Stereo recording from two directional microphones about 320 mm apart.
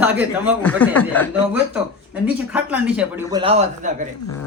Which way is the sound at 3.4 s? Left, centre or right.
Centre.